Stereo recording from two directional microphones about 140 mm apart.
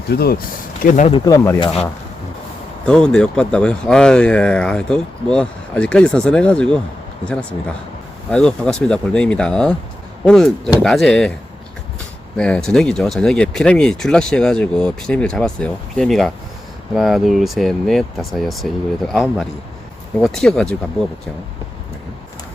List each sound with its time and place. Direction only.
0.2 s speech: 90° left
1.2 s speech: 25° left (ahead or behind)
1.5 s speech: 40° left (ahead or behind)
2.8 s speech: 5° left (ahead or behind)
8.3 s speech: 5° left (ahead or behind)
12.4 s speech: 5° left (ahead or behind)